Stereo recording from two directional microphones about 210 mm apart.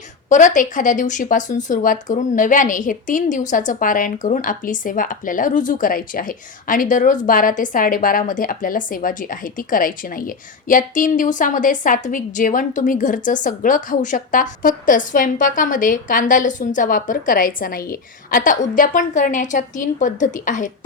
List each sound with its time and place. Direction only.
0.3 s speech: 35° left (ahead or behind)